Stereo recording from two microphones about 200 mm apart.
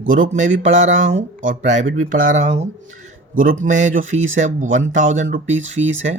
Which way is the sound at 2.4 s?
35° right (ahead or behind).